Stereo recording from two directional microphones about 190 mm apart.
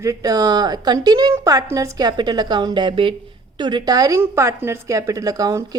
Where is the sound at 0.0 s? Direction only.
15° right (ahead or behind).